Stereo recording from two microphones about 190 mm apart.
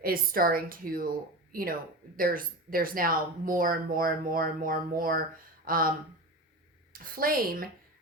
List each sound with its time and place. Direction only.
0.0 s speech: 50° right (ahead or behind)
2.1 s speech: 50° right (ahead or behind)
6.9 s speech: 50° right (ahead or behind)